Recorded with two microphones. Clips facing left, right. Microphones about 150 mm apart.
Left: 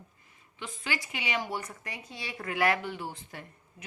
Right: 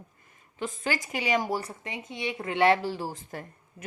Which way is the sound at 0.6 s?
45° right (ahead or behind).